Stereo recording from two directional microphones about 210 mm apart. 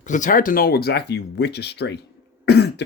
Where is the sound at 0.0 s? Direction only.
35° left (ahead or behind).